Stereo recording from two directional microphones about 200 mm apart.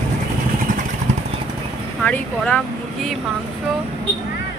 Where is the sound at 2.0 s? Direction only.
5° left (ahead or behind).